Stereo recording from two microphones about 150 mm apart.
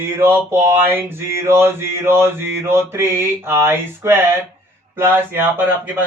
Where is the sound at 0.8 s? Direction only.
15° right (ahead or behind).